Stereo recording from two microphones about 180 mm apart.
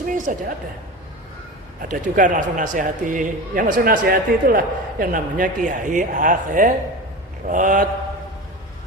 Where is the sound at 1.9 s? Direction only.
45° right (ahead or behind).